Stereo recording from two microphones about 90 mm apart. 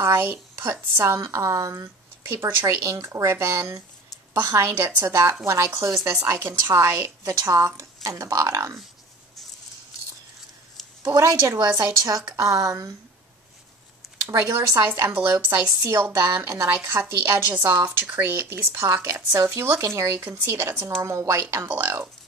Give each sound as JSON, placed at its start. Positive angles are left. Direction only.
{"t": 0.0, "sound": "a woman's voice", "side_deg": -25}
{"t": 11.1, "sound": "speech", "side_deg": -35}
{"t": 14.3, "sound": "a woman's voice", "side_deg": -30}